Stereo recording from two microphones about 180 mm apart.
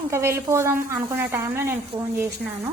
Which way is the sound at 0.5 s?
15° right (ahead or behind).